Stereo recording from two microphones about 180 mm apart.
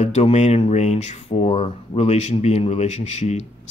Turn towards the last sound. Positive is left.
turn(degrees=40)  # may be behind; listen again after turning